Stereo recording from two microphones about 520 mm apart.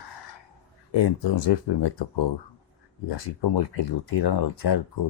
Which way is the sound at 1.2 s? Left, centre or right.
Left.